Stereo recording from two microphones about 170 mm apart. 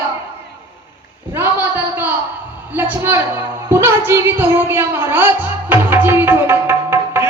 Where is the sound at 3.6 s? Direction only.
15° right (ahead or behind).